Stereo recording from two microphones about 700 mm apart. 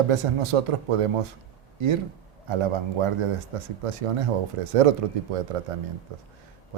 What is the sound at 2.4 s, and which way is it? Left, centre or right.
Speech, right.